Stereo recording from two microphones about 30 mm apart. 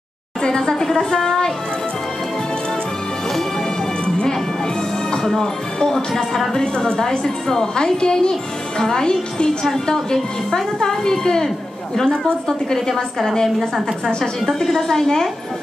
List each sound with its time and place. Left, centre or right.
0.4 s a woman's voice: centre
5.9 s a woman's voice: centre
6.6 s a woman's voice: left
9.7 s a woman's voice: centre
13.6 s a woman's voice: centre
14.6 s a woman's voice: centre